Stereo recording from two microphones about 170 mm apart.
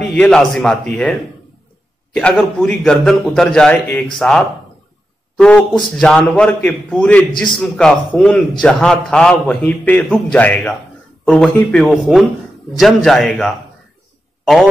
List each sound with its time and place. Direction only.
0.0 s a man's voice: 5° left (ahead or behind)
2.1 s a man's voice: 5° left (ahead or behind)